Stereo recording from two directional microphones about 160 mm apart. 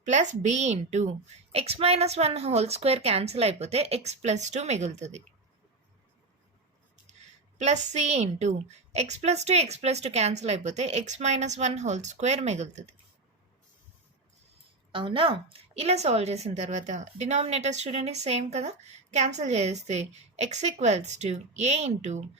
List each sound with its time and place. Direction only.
0.0 s a woman's voice: 50° right (ahead or behind)
7.6 s a woman's voice: 45° right (ahead or behind)
14.9 s a woman's voice: 30° right (ahead or behind)